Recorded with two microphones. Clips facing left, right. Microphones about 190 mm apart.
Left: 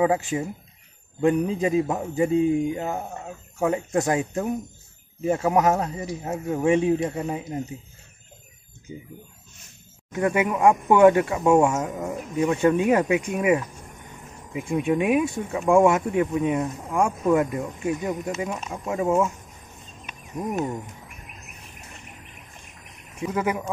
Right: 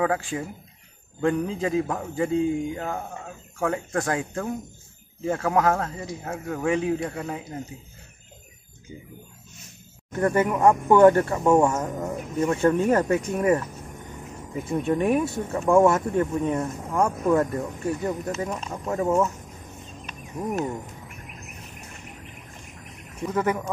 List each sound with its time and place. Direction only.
0.0 s speech: 20° left (ahead or behind)
10.1 s speech: 10° left (ahead or behind)
20.1 s a sound: 15° left (ahead or behind)
23.2 s speech: 5° left (ahead or behind)